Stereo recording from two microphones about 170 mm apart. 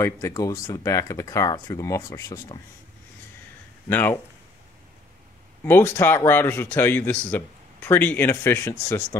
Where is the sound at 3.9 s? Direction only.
10° left (ahead or behind).